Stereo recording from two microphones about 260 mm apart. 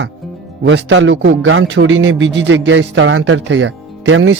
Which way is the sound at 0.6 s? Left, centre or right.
Right.